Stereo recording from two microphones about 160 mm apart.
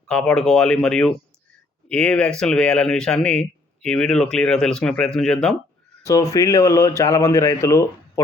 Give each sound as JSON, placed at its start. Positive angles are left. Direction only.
{"t": 0.1, "sound": "speech", "side_deg": 5}
{"t": 6.0, "sound": "speech", "side_deg": 20}